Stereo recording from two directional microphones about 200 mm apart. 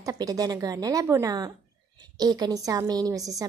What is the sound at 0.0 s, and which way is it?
A woman's voice, 20° right (ahead or behind).